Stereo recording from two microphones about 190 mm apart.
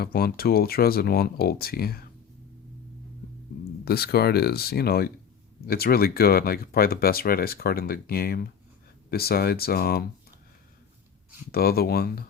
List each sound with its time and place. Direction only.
0.0 s speech: 55° left (ahead or behind)
3.8 s speech: 55° left (ahead or behind)
11.5 s speech: 55° left (ahead or behind)